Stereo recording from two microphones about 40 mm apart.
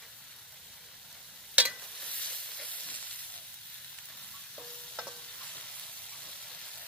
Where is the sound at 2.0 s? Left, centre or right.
Left.